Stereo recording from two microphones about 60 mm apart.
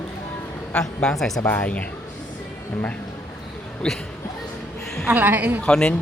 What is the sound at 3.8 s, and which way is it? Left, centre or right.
Speech, centre.